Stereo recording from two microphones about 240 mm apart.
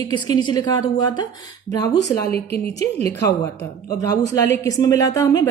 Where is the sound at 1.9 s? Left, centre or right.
Left.